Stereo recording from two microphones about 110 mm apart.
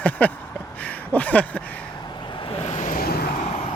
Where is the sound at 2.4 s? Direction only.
75° left (ahead or behind).